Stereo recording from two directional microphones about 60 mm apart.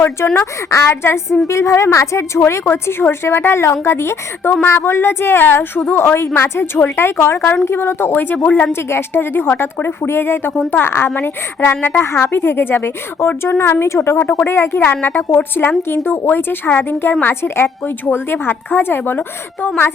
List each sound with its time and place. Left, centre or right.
0.3 s a woman's voice: left
14.2 s a woman's voice: left